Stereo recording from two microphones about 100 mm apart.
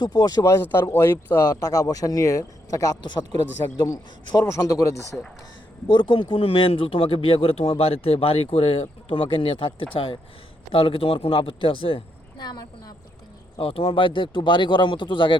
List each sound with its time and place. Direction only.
0.0 s a man's voice: 40° left (ahead or behind); by 1.4 s 25° left (ahead or behind)
1.4 s a man's voice: 35° left (ahead or behind)
5.9 s a man's voice: 50° left (ahead or behind)
12.4 s speech: 45° left (ahead or behind)
13.6 s speech: 70° left (ahead or behind); by 15.4 s 55° left (ahead or behind)